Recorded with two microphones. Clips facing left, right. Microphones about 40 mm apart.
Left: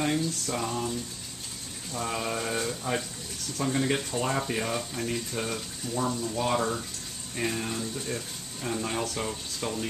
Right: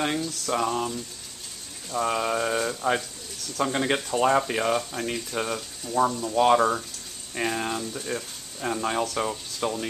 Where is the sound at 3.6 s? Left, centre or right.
Right.